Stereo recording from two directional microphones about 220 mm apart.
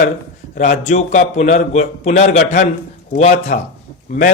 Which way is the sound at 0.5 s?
35° left (ahead or behind).